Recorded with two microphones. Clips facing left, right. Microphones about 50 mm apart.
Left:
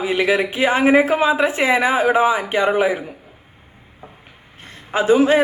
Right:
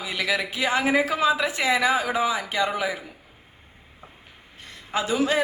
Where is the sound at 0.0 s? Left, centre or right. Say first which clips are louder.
Left 8 dB; left.